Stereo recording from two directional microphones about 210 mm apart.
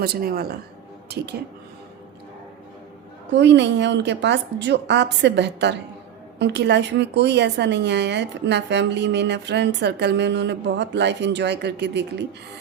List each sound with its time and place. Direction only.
0.0 s speech: 45° right (ahead or behind)
3.3 s a woman's voice: 55° right (ahead or behind)